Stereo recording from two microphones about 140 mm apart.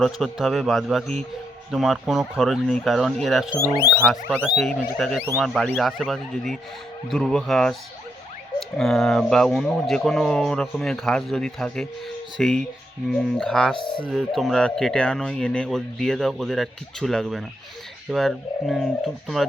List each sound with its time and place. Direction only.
0.0 s speech: centre (ahead or behind)
13.7 s speech: 35° left (ahead or behind)
14.1 s speech: centre (ahead or behind)